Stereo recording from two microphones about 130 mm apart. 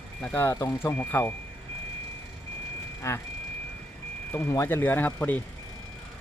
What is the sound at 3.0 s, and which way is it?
Speech, 20° left (ahead or behind).